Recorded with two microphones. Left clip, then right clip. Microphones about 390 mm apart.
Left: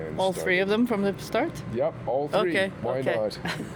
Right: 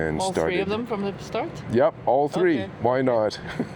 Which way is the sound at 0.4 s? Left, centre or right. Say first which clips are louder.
Left 1 dB; left.